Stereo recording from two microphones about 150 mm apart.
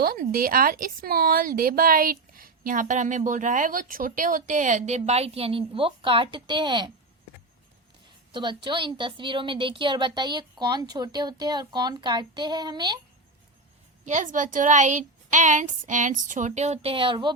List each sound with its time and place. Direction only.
0.0 s speech: 80° right; by 6.9 s 30° right (ahead or behind)
8.3 s a woman's voice: 30° right (ahead or behind)
14.0 s speech: 55° right (ahead or behind); by 17.3 s 35° right (ahead or behind)